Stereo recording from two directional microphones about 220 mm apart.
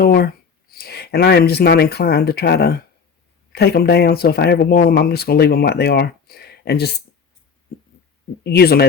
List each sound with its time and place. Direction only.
0.0 s speech: 45° left (ahead or behind)
8.4 s speech: 45° left (ahead or behind)